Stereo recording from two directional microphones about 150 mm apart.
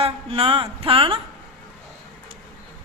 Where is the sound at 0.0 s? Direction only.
40° right (ahead or behind).